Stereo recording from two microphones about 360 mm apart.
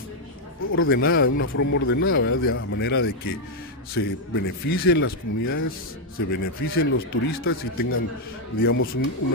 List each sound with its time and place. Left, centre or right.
0.6 s a man's voice: left